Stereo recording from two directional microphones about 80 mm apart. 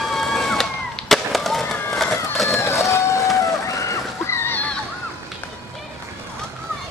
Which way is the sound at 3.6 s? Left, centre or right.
Left.